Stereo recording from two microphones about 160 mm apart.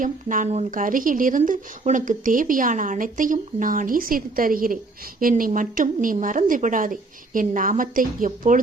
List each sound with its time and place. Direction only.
0.0 s speech: 55° right (ahead or behind)